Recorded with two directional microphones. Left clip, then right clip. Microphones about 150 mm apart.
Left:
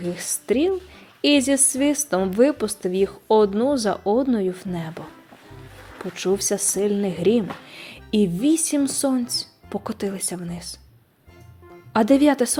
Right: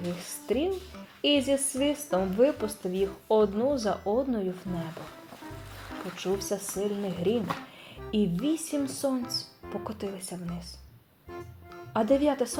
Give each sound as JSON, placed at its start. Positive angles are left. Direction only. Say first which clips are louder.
{"t": 0.2, "sound": "a woman's voice", "louder": "left 8 dB", "side_deg": 30}
{"t": 6.1, "sound": "a woman's voice", "louder": "left 9 dB", "side_deg": 40}
{"t": 11.9, "sound": "a woman's voice", "louder": "left 7 dB", "side_deg": 40}